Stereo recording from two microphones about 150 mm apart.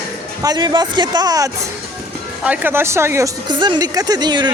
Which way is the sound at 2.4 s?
10° right (ahead or behind).